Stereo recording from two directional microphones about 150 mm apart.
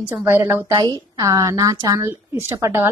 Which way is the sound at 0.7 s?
30° right (ahead or behind).